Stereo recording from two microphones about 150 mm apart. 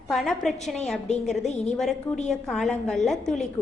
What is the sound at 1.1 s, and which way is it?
Speech, 50° left (ahead or behind).